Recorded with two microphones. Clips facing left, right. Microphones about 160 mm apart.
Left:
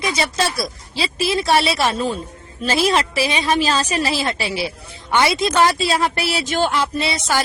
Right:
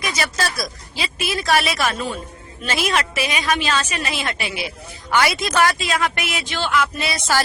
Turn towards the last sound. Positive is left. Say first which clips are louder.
# left 1 dB
turn(degrees=30)  # may be behind; listen again after turning